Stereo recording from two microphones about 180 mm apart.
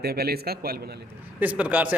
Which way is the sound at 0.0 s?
60° right (ahead or behind).